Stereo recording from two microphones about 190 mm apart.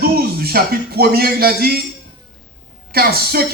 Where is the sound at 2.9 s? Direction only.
55° right (ahead or behind).